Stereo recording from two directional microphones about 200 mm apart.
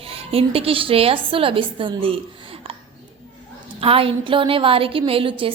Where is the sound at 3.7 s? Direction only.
30° right (ahead or behind).